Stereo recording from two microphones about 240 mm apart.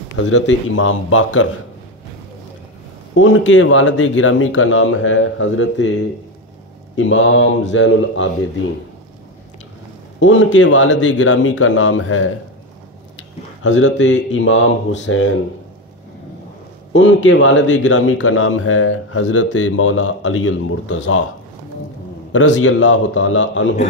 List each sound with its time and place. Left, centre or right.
0.3 s a man's voice: left
3.2 s speech: left
10.2 s speech: left
13.6 s speech: left
16.9 s a man's voice: left
22.3 s speech: left